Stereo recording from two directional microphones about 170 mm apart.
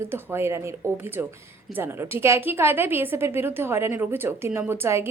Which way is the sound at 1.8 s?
15° right (ahead or behind).